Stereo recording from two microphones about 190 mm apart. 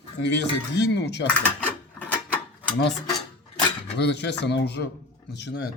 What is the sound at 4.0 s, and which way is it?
Speech, 65° left (ahead or behind).